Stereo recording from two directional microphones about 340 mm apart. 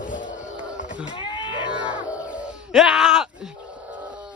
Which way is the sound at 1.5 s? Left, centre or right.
Centre.